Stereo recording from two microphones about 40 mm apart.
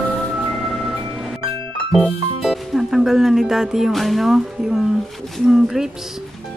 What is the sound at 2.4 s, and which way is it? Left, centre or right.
Music, centre.